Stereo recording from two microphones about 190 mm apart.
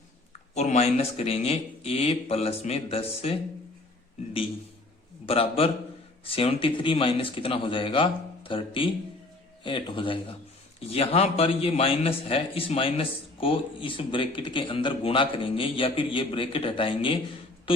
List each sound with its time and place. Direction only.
0.5 s speech: 35° left (ahead or behind)
5.3 s a man's voice: 30° left (ahead or behind)